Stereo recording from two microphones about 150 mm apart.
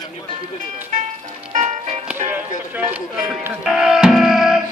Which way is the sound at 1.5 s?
50° right (ahead or behind).